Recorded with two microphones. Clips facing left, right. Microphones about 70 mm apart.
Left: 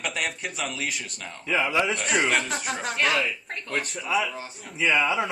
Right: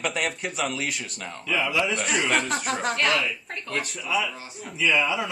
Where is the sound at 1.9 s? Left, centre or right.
Centre.